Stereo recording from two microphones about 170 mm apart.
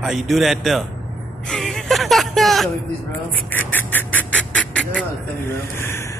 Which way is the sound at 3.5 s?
10° left (ahead or behind).